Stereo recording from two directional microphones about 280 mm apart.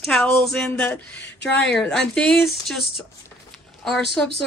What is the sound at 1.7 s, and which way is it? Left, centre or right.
A woman's voice, centre.